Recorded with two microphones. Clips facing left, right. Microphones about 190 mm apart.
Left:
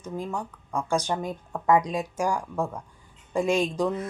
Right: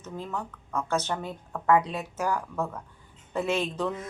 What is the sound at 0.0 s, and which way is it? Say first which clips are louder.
Speech: left 3 dB; 10° left (ahead or behind).